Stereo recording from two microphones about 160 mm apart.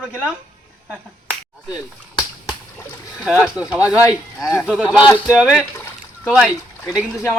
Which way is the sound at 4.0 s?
20° left (ahead or behind).